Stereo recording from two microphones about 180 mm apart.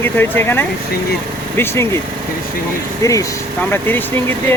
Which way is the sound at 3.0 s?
15° left (ahead or behind).